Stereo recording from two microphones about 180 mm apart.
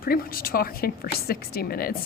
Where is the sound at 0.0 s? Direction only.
55° left (ahead or behind).